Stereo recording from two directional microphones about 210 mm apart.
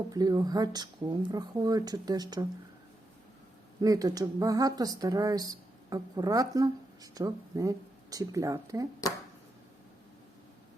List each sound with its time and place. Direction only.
0.1 s speech: 20° right (ahead or behind)
3.8 s speech: 15° right (ahead or behind)